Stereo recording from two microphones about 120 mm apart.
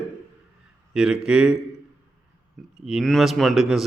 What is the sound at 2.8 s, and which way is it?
Speech, centre (ahead or behind).